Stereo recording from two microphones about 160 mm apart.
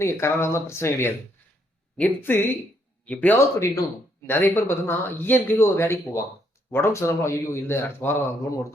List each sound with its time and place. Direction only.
0.0 s speech: 15° left (ahead or behind)